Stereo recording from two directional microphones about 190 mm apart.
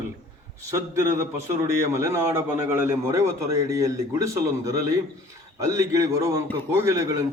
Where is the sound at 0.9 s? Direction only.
15° right (ahead or behind).